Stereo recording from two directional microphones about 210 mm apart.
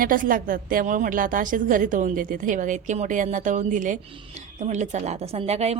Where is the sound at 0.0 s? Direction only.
40° right (ahead or behind).